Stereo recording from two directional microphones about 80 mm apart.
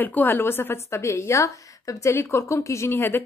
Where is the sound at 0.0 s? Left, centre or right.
Left.